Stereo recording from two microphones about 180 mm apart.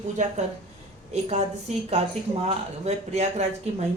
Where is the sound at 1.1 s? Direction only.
35° right (ahead or behind).